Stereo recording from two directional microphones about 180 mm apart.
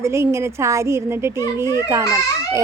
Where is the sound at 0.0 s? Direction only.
15° right (ahead or behind).